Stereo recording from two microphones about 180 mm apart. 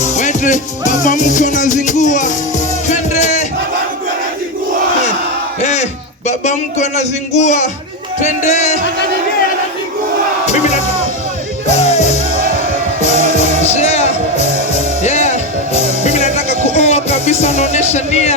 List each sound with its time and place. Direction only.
0.0 s music: 40° left (ahead or behind)
6.2 s speech: 40° left (ahead or behind)
10.5 s music: 40° left (ahead or behind)